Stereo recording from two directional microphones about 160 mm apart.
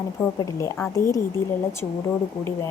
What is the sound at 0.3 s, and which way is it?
Speech, 20° left (ahead or behind).